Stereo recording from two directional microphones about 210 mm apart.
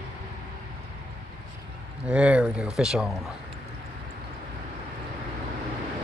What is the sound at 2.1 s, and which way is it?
Speech, 5° right (ahead or behind).